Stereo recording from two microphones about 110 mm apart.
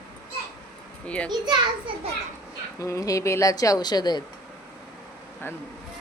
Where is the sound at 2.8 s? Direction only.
30° left (ahead or behind).